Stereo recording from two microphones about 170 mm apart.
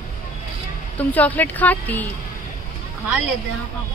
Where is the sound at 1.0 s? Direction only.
10° left (ahead or behind).